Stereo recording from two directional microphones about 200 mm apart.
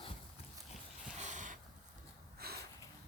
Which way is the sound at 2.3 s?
50° right (ahead or behind).